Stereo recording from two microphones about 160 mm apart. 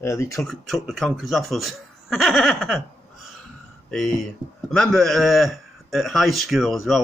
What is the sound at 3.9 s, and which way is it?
Speech, centre (ahead or behind).